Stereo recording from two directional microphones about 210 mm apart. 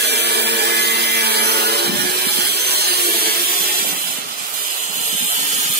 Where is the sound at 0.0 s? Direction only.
50° right (ahead or behind).